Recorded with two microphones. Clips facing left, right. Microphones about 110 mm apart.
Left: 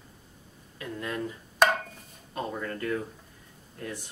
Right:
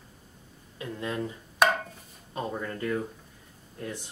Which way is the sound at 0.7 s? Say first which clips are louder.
Right 1 dB; 20° right (ahead or behind).